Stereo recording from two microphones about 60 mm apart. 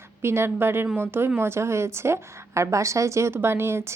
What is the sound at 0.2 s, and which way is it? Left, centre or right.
A woman's voice, right.